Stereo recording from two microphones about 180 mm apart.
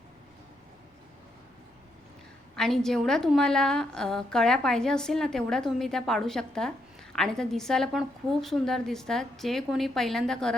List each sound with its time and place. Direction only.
2.6 s a woman's voice: centre (ahead or behind)